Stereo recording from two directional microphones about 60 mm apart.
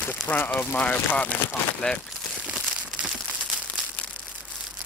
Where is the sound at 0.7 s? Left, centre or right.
Left.